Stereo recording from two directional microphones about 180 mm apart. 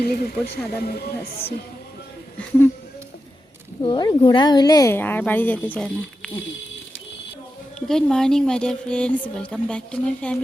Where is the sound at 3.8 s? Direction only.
25° left (ahead or behind); by 6.3 s 5° left (ahead or behind).